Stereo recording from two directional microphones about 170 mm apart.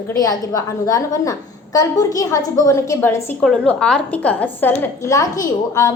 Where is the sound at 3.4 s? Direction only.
5° left (ahead or behind); by 5.9 s 20° left (ahead or behind).